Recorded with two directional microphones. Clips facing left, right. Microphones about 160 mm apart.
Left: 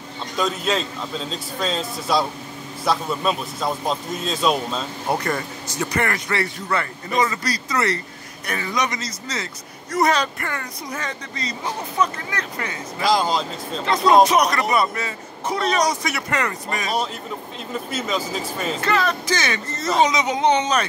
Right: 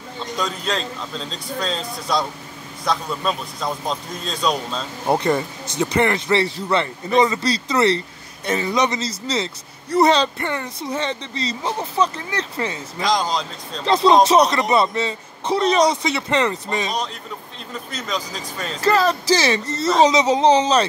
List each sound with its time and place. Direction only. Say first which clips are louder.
0.4 s a man's voice: left 3 dB; 5° left (ahead or behind)
5.0 s speech: right 6 dB; 20° right (ahead or behind)
13.0 s a man's voice: left 1 dB; 5° left (ahead or behind)
13.8 s speech: right 1 dB; 25° right (ahead or behind)
17.9 s a man's voice: left 2 dB; 5° left (ahead or behind)
18.8 s speech: right 6 dB; 35° right (ahead or behind)